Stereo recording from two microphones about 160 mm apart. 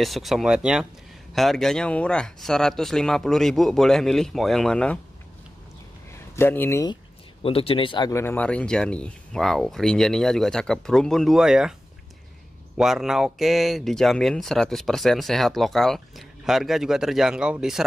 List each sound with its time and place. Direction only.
0.0 s speech: centre (ahead or behind)
6.1 s speech: 15° left (ahead or behind)
7.4 s speech: 35° left (ahead or behind)
8.1 s speech: 15° left (ahead or behind); by 11.7 s 5° right (ahead or behind)
12.7 s speech: centre (ahead or behind)